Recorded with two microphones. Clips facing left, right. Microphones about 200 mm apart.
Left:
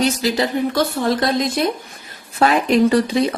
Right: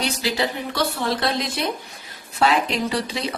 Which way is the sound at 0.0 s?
45° left (ahead or behind).